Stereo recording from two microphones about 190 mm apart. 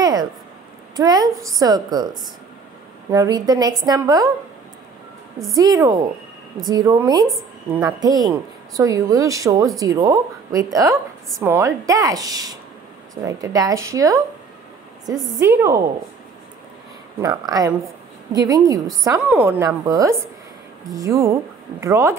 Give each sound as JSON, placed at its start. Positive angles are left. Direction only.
{"t": 0.0, "sound": "a sound", "side_deg": -20}
{"t": 0.9, "sound": "a woman's voice", "side_deg": -20}
{"t": 3.1, "sound": "a woman's voice", "side_deg": -20}
{"t": 5.6, "sound": "a woman's voice", "side_deg": -20}
{"t": 17.2, "sound": "a woman's voice", "side_deg": -20}